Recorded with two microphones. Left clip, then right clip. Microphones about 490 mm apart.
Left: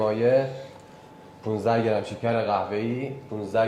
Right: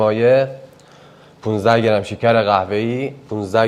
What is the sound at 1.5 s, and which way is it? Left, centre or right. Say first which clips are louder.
Speech: right 9 dB; right.